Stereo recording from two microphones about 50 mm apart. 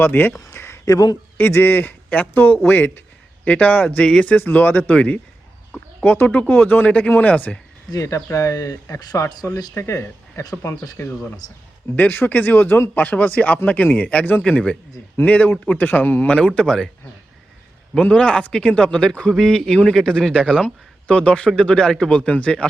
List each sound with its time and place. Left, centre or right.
0.0 s a man's voice: left
0.3 s a sound: left
1.4 s a man's voice: left
3.4 s speech: left
5.7 s bird: left
6.1 s speech: left
8.0 s speech: left
11.9 s a man's voice: left
16.6 s speech: centre
18.0 s speech: left
22.3 s speech: left